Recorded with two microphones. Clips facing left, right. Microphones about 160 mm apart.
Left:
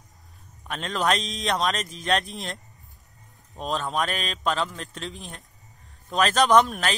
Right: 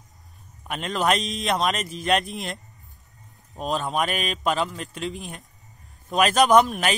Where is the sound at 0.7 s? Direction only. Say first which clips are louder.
Right 2 dB; 5° right (ahead or behind).